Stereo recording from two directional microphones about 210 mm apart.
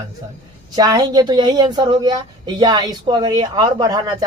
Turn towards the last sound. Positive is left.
turn(degrees=-20)  # may be behind; listen again after turning